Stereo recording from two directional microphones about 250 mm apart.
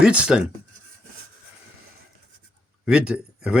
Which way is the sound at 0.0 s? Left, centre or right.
Centre.